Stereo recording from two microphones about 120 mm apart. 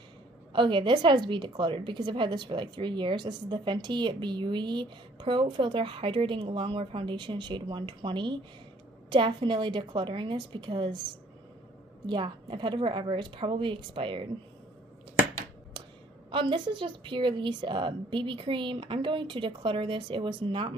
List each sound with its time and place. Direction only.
0.5 s a woman's voice: 45° right (ahead or behind)
12.1 s a woman's voice: 45° right (ahead or behind)
16.3 s a woman's voice: 45° right (ahead or behind)